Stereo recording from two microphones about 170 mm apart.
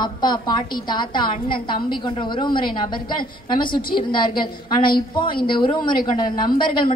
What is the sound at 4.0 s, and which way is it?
A woman's voice, 30° left (ahead or behind).